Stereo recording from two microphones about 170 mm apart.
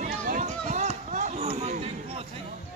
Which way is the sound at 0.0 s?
45° right (ahead or behind).